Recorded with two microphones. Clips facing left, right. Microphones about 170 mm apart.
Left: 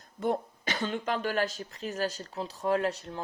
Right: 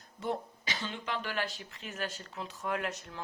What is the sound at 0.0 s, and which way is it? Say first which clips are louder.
Speech: left 6 dB; 50° left (ahead or behind).